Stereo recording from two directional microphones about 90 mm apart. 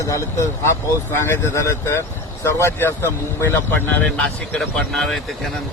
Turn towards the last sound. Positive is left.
turn(degrees=5)  # may be behind; listen again after turning